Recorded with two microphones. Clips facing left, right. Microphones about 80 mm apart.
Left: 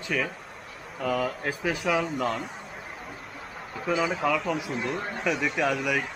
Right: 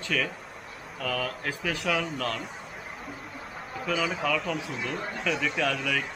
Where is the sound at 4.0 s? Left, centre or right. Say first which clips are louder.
Left 3 dB; centre.